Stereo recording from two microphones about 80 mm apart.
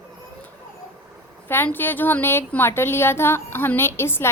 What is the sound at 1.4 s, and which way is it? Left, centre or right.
A woman's voice, left.